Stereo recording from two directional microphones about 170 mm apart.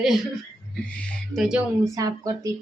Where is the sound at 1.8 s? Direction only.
20° right (ahead or behind).